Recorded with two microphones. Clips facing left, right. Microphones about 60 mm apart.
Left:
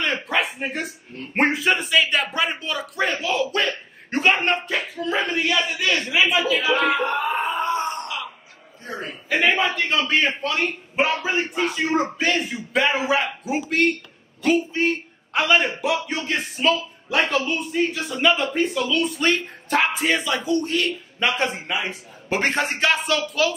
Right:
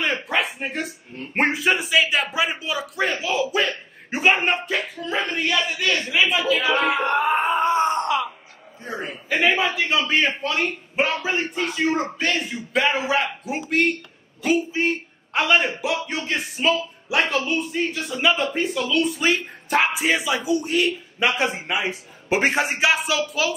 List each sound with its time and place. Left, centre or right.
0.0 s a sound: centre
1.3 s a man's voice: centre
7.4 s groan: right
8.8 s a man's voice: centre
9.3 s a man's voice: centre